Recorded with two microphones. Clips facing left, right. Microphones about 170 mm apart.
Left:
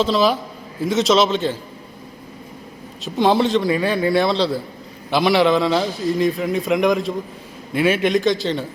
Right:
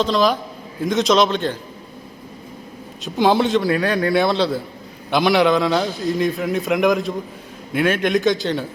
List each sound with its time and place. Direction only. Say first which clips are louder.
0.0 s a man's voice: even; 5° left (ahead or behind)
3.0 s a man's voice: even; centre (ahead or behind)